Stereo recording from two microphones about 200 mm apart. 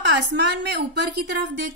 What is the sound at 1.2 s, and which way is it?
Speech, 60° right (ahead or behind).